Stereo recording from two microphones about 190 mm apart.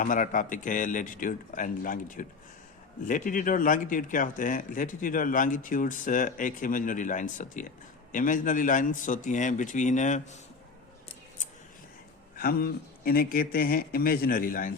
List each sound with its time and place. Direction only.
0.0 s speech: 45° left (ahead or behind)
12.4 s speech: 50° left (ahead or behind)